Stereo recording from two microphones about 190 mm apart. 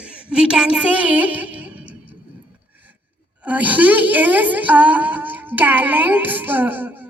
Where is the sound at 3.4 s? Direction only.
10° right (ahead or behind).